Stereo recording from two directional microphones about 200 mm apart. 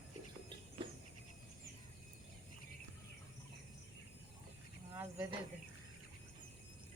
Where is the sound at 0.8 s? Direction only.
25° right (ahead or behind).